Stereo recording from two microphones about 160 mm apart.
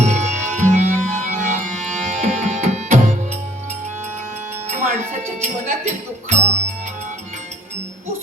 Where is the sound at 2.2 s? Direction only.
45° right (ahead or behind).